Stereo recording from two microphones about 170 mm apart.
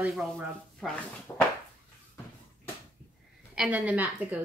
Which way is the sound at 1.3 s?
15° left (ahead or behind).